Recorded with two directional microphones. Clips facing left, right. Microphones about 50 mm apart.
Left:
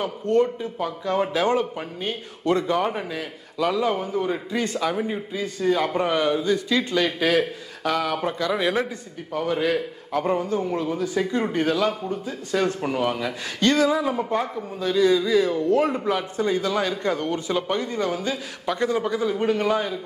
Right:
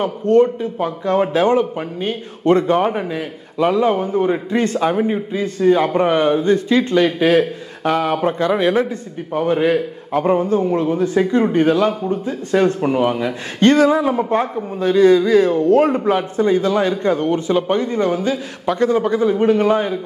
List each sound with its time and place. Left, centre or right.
0.0 s a man's voice: right
2.4 s speech: right
7.1 s speech: right
12.8 s a man's voice: right